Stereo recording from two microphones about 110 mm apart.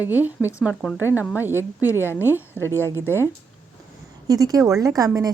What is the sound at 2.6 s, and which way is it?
Speech, 20° left (ahead or behind).